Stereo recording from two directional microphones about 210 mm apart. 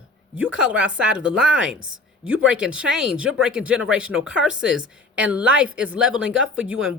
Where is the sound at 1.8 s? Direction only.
70° right (ahead or behind).